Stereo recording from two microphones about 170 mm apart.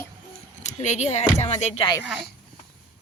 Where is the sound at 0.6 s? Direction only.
40° left (ahead or behind).